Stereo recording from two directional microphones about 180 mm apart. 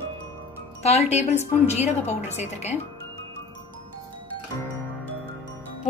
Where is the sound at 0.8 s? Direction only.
35° left (ahead or behind).